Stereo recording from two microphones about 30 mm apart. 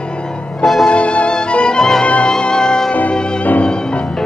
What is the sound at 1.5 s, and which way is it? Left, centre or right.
Music, left.